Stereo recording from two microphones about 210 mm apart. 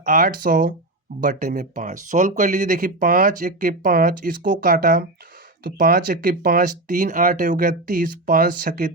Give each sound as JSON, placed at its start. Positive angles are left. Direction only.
{"t": 0.0, "sound": "speech", "side_deg": -40}